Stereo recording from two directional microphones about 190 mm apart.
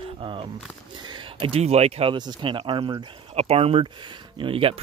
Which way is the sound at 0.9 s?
25° right (ahead or behind).